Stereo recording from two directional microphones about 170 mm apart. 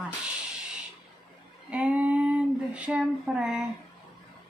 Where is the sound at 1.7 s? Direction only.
10° right (ahead or behind).